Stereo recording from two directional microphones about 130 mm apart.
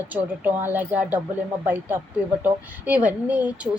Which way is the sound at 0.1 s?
15° right (ahead or behind).